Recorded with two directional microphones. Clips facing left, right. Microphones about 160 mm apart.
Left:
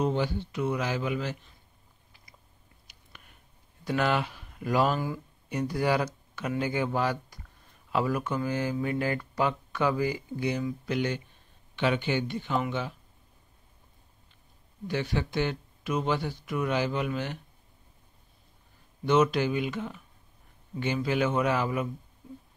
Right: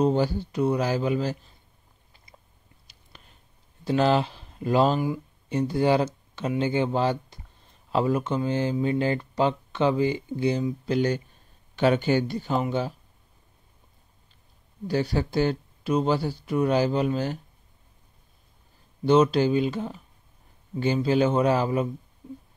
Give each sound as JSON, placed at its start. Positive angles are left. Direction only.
{"t": 0.0, "sound": "speech", "side_deg": -40}
{"t": 2.9, "sound": "a sound", "side_deg": -30}
{"t": 3.8, "sound": "speech", "side_deg": -30}
{"t": 14.9, "sound": "speech", "side_deg": -35}
{"t": 19.0, "sound": "speech", "side_deg": -30}